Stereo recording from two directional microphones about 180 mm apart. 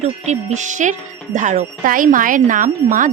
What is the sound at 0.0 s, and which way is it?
Speech, 40° right (ahead or behind).